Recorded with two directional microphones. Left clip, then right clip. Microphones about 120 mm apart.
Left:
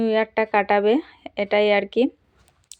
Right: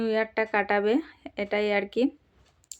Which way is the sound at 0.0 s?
25° left (ahead or behind).